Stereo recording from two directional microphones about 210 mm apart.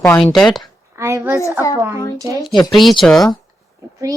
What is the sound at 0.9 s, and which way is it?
A woman's voice, 15° right (ahead or behind).